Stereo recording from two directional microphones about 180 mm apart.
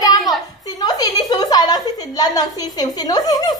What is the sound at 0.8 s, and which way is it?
A woman's voice, 20° left (ahead or behind).